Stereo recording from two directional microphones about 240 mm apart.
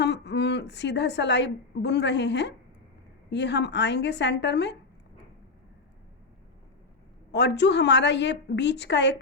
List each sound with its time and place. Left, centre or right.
0.0 s a woman's voice: left
7.3 s a woman's voice: left